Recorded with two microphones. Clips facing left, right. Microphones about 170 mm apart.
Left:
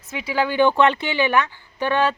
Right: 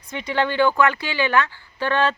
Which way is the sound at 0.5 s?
25° left (ahead or behind).